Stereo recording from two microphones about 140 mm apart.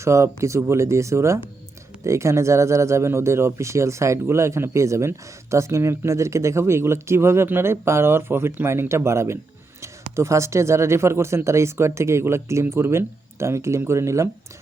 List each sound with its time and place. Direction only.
0.0 s speech: 20° right (ahead or behind)